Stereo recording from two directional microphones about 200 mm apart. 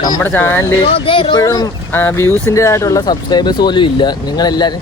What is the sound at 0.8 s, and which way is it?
Speech, 25° left (ahead or behind).